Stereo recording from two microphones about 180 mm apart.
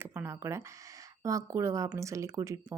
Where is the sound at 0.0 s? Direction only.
10° right (ahead or behind).